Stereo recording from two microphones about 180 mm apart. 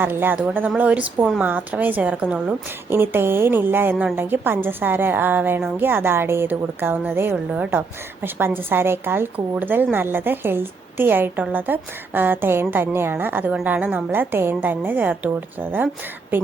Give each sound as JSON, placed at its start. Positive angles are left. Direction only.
{"t": 0.0, "sound": "a woman's voice", "side_deg": -10}